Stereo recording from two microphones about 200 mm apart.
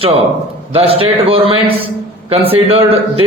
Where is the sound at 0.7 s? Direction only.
30° right (ahead or behind).